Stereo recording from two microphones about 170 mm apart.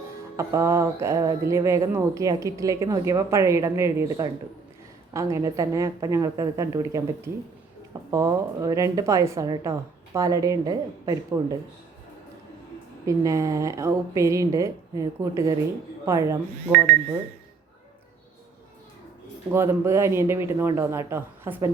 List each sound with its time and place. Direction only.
0.3 s a woman's voice: 15° right (ahead or behind)
13.1 s a woman's voice: 20° right (ahead or behind)
19.5 s speech: 15° right (ahead or behind)